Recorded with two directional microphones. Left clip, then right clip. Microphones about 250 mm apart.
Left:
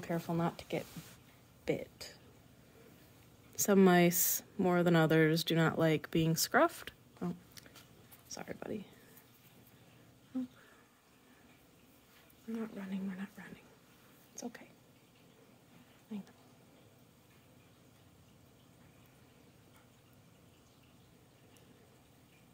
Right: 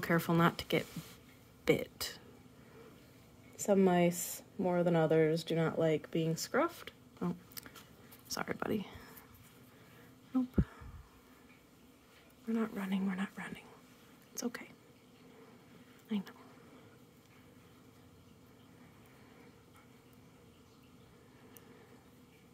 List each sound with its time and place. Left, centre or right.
0.0 s speech: right
3.5 s speech: left; by 7.0 s centre
7.2 s a sound: centre
8.3 s speech: right
10.3 s a sound: centre
12.5 s speech: right
16.1 s speech: right